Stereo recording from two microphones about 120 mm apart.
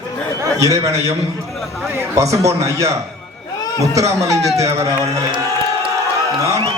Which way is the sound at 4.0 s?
25° right (ahead or behind).